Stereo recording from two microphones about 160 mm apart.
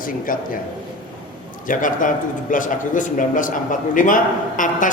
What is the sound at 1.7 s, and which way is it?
A man's voice, 55° left (ahead or behind).